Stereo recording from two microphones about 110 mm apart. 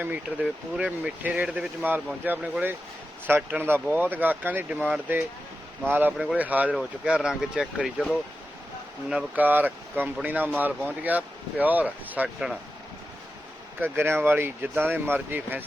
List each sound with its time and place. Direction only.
0.4 s speech: 10° right (ahead or behind)
9.0 s speech: 10° right (ahead or behind)
13.7 s speech: 20° right (ahead or behind)